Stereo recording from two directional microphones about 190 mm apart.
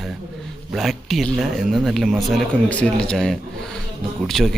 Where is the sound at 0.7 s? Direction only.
Centre (ahead or behind).